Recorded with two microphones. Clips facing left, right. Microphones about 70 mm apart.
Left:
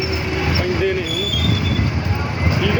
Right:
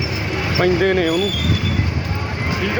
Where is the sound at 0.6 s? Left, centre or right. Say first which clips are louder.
Right 7 dB; right.